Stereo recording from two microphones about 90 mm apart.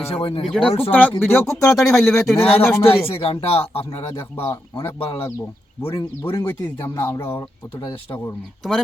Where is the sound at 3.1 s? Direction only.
90° left.